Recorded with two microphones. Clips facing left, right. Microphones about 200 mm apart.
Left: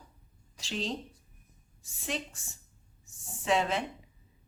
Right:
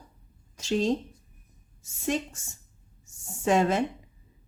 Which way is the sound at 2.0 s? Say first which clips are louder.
Right 8 dB; 45° right (ahead or behind).